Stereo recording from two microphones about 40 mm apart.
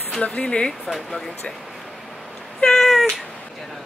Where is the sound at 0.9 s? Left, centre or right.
Centre.